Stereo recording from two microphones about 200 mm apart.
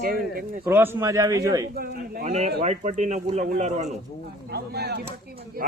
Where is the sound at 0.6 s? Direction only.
10° right (ahead or behind).